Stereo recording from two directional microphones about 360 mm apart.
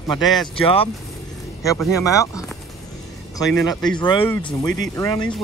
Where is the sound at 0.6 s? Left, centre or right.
Centre.